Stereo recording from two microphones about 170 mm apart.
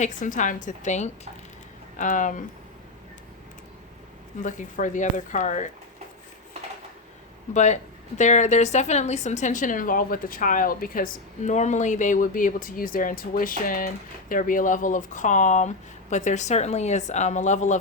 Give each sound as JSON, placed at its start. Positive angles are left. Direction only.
{"t": 0.0, "sound": "a woman's voice", "side_deg": 50}
{"t": 4.4, "sound": "a woman's voice", "side_deg": 50}
{"t": 7.5, "sound": "a woman's voice", "side_deg": 45}